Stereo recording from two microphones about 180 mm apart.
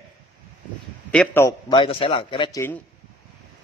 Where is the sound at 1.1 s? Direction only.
10° left (ahead or behind).